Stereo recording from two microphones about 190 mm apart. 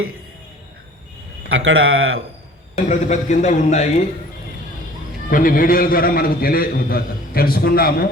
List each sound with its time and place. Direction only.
1.5 s speech: 90° right
2.9 s speech: 40° left (ahead or behind)
5.3 s a man's voice: 50° left (ahead or behind)